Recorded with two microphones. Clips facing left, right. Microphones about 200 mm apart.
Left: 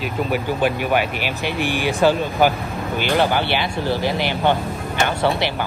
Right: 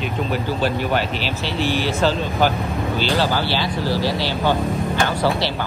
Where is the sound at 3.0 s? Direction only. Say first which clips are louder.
Left 3 dB; 55° left (ahead or behind).